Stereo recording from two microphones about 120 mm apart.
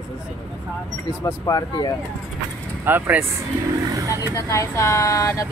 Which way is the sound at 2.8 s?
15° right (ahead or behind).